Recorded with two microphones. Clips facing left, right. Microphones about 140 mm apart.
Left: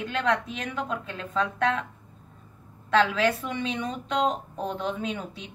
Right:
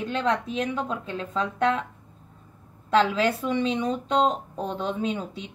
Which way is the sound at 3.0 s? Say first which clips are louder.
Right 1 dB; 30° right (ahead or behind).